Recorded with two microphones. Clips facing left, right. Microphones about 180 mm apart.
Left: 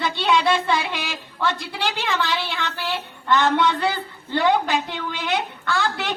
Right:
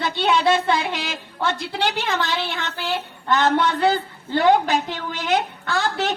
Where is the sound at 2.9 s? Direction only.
45° right (ahead or behind).